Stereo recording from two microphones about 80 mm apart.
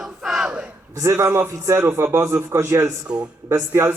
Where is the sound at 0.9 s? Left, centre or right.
Right.